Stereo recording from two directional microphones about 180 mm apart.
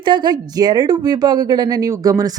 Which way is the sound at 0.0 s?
25° right (ahead or behind).